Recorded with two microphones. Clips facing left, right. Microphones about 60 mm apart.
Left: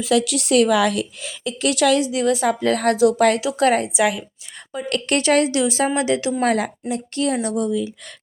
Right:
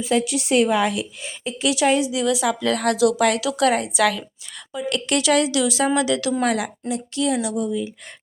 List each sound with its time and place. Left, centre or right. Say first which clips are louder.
0.0 s speech: left 2 dB; left
1.6 s a woman's voice: left 1 dB; left
3.4 s a woman's voice: left 1 dB; left
3.9 s a woman's voice: even; centre
4.7 s a woman's voice: left 1 dB; left
6.4 s speech: left 2 dB; left
7.7 s speech: left 3 dB; left